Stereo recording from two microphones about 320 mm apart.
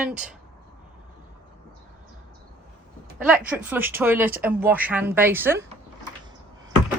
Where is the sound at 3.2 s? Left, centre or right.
Centre.